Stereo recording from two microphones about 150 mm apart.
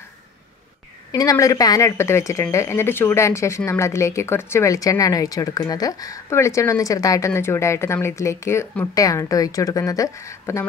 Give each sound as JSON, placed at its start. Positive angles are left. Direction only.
{"t": 1.1, "sound": "speech", "side_deg": 25}